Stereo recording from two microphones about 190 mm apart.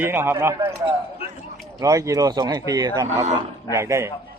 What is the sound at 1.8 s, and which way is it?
A man's voice, 15° right (ahead or behind).